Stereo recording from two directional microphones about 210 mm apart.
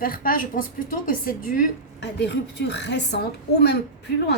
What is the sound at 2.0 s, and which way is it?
A woman's voice, 55° left (ahead or behind).